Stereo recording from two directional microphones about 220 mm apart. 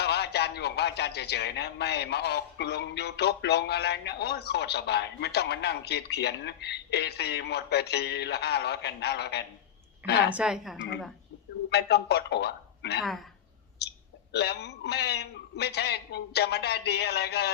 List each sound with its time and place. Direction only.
0.0 s a man's voice: 50° left (ahead or behind)
10.2 s a woman's voice: 5° right (ahead or behind)
11.7 s a man's voice: 50° left (ahead or behind)
13.0 s a woman's voice: centre (ahead or behind)
13.8 s clicking: 50° left (ahead or behind)
14.3 s a man's voice: 50° left (ahead or behind)